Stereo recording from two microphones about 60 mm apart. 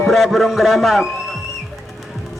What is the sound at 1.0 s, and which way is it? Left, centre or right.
Music, centre.